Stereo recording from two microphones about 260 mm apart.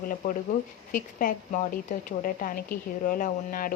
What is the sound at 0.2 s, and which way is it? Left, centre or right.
Speech, left.